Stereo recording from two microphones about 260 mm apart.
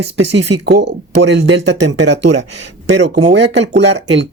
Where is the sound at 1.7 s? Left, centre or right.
Right.